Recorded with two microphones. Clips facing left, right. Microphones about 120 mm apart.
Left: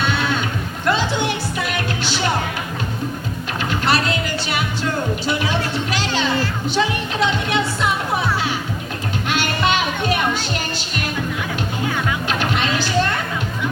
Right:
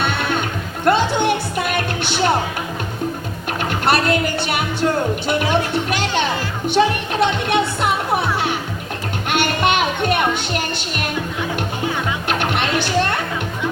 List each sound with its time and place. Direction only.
0.1 s music: 55° right (ahead or behind)
3.7 s music: 55° right (ahead or behind)
9.6 s music: 55° right (ahead or behind)
12.3 s music: 60° right (ahead or behind)